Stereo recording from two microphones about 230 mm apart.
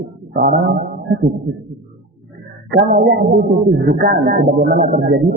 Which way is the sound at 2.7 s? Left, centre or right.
Right.